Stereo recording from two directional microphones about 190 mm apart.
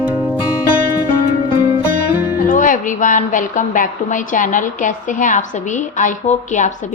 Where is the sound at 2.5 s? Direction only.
45° left (ahead or behind).